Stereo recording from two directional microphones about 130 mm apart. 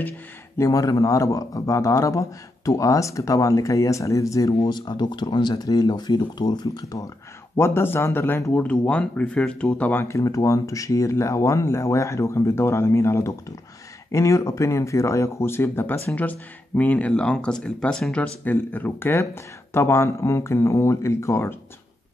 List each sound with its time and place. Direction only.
0.6 s a man's voice: 25° left (ahead or behind)
7.5 s a man's voice: 20° left (ahead or behind)